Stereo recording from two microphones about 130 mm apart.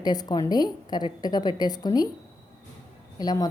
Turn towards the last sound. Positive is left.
turn(degrees=30)  # may be behind; listen again after turning